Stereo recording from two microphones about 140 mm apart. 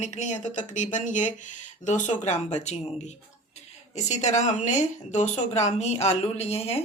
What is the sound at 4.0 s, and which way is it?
Speech, 55° left (ahead or behind).